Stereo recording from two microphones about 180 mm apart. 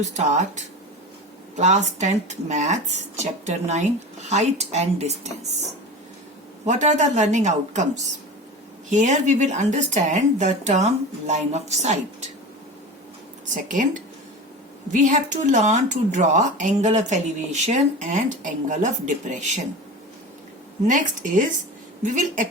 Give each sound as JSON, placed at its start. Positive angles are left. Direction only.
{"t": 0.0, "sound": "speech", "side_deg": -40}
{"t": 6.7, "sound": "speech", "side_deg": -40}
{"t": 13.4, "sound": "speech", "side_deg": -45}
{"t": 15.0, "sound": "speech", "side_deg": -40}
{"t": 20.8, "sound": "speech", "side_deg": -45}